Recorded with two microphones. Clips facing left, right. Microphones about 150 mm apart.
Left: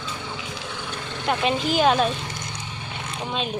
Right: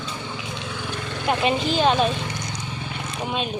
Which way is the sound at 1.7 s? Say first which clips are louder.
Left 1 dB; 5° left (ahead or behind).